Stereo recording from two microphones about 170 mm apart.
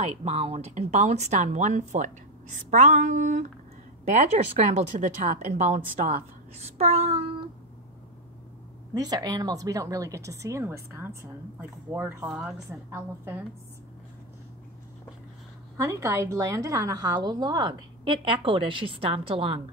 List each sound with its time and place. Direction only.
0.0 s a woman's voice: 40° right (ahead or behind)
8.9 s a woman's voice: 20° right (ahead or behind)
15.8 s a woman's voice: 20° right (ahead or behind)